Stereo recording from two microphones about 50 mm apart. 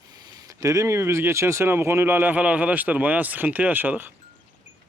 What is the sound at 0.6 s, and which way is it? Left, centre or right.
Speech, right.